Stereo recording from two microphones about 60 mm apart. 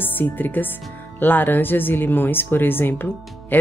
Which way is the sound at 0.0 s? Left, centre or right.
Left.